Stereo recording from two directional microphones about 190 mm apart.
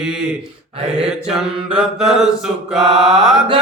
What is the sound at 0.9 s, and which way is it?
Chant, 5° right (ahead or behind).